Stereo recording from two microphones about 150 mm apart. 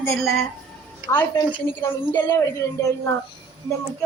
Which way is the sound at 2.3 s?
20° left (ahead or behind).